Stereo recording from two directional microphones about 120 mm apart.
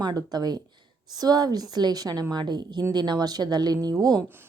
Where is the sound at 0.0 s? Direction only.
35° right (ahead or behind).